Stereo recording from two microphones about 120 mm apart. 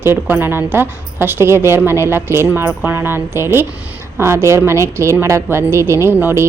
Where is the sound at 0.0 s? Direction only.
20° right (ahead or behind).